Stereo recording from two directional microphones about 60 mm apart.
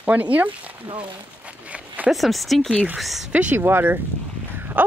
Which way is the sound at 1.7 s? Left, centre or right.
Right.